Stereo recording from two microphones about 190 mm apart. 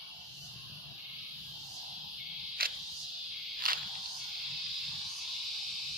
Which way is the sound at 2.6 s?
50° right (ahead or behind).